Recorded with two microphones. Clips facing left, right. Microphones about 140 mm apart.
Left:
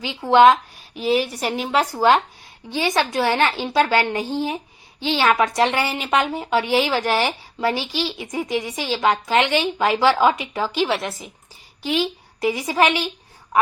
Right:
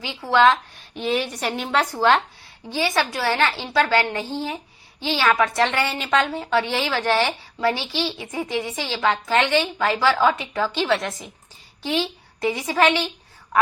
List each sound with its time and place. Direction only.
0.0 s speech: 20° left (ahead or behind)
0.9 s a woman's voice: 5° left (ahead or behind)